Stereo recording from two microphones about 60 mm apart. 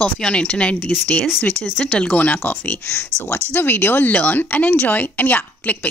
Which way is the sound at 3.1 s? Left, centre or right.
Left.